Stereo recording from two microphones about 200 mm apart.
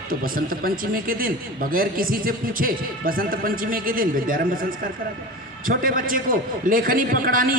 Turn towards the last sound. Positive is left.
turn(degrees=-45)  # may be behind; listen again after turning